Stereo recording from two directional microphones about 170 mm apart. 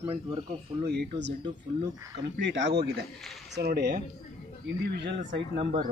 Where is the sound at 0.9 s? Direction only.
85° right.